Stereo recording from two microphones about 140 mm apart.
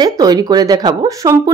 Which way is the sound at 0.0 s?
25° right (ahead or behind).